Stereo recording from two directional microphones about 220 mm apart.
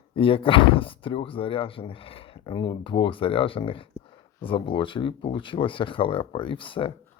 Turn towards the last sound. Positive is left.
turn(degrees=25)  # may be behind; listen again after turning